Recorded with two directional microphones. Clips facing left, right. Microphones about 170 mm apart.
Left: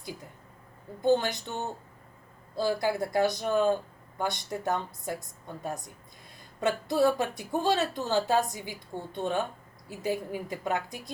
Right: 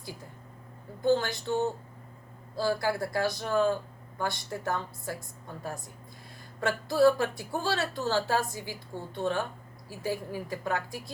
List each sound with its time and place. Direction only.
1.0 s a woman's voice: 20° left (ahead or behind)
2.6 s a woman's voice: 20° left (ahead or behind)